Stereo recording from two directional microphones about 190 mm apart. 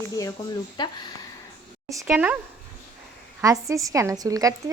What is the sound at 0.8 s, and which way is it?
Speech, 25° left (ahead or behind).